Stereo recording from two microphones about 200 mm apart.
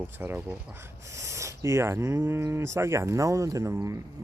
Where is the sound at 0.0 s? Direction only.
10° right (ahead or behind).